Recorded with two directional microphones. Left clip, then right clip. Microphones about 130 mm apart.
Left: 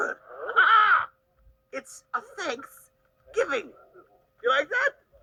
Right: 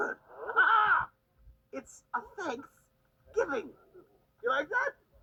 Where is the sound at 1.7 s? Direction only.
50° left (ahead or behind).